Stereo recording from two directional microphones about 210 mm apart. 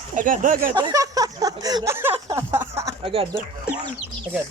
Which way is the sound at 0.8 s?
20° right (ahead or behind).